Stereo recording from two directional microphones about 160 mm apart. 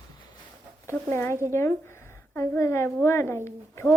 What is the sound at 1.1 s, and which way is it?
A woman's voice, 15° left (ahead or behind).